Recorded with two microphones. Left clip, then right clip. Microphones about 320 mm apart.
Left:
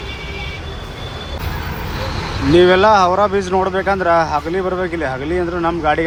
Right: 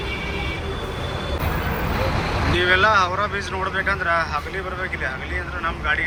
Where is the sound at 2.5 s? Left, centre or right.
Centre.